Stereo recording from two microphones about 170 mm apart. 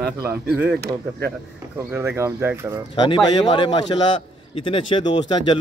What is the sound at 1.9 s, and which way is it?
Speech, 10° right (ahead or behind).